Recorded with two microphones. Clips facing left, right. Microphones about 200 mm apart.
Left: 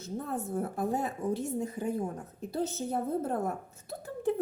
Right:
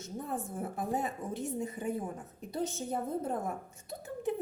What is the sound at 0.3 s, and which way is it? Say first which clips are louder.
Speech: left 1 dB; centre (ahead or behind).